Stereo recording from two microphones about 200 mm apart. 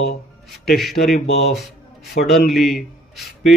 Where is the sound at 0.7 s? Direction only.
Centre (ahead or behind).